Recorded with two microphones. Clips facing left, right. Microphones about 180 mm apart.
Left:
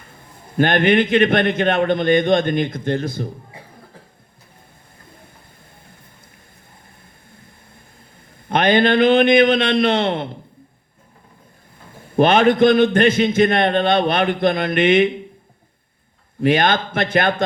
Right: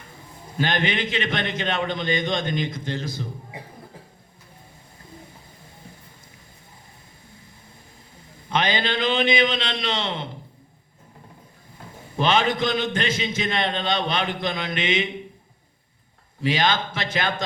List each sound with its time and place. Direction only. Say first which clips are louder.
0.5 s a man's voice: left 9 dB; 55° left (ahead or behind)
8.4 s a man's voice: left 9 dB; 55° left (ahead or behind)
12.1 s a man's voice: left 8 dB; 55° left (ahead or behind)
16.4 s a man's voice: left 6 dB; 55° left (ahead or behind)